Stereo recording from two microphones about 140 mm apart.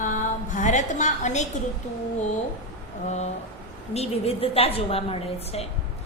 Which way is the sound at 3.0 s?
55° left (ahead or behind).